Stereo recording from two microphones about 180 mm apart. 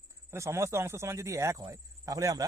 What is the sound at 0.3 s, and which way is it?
Speech, 15° right (ahead or behind).